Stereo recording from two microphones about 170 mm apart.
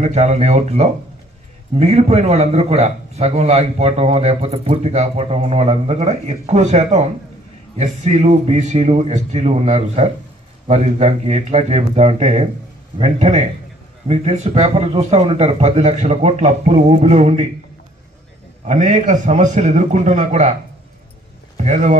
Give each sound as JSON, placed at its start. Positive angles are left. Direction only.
{"t": 0.0, "sound": "a man's voice", "side_deg": -40}
{"t": 18.7, "sound": "a man's voice", "side_deg": -45}
{"t": 21.5, "sound": "a man's voice", "side_deg": -45}